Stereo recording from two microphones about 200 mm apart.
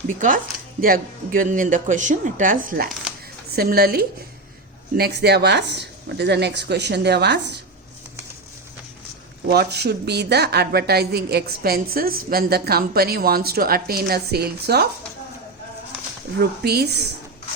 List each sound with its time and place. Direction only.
0.8 s a woman's voice: 45° right (ahead or behind)
9.5 s a woman's voice: 55° right (ahead or behind)
16.4 s a woman's voice: 55° right (ahead or behind)